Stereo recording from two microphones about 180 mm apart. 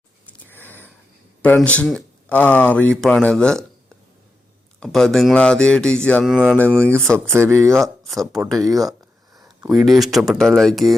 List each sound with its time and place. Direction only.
0.3 s a sound: 10° left (ahead or behind)
1.4 s speech: 10° left (ahead or behind)
4.8 s speech: 5° left (ahead or behind)
6.3 s speech: 5° right (ahead or behind)
6.6 s speech: 5° left (ahead or behind)
7.3 s speech: 15° right (ahead or behind)
7.7 s speech: centre (ahead or behind)
8.6 s a sound: 20° right (ahead or behind)
9.6 s speech: centre (ahead or behind)